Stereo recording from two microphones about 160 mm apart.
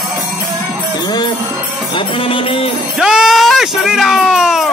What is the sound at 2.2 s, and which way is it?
Speech, 35° left (ahead or behind).